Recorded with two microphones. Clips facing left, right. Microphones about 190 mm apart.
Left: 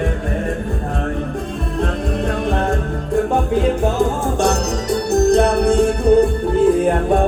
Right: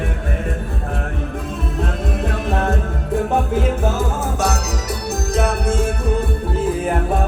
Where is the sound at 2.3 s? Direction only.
5° right (ahead or behind).